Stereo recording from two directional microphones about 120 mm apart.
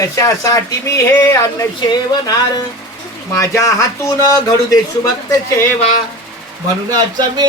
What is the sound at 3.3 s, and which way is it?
A man's voice, 25° left (ahead or behind).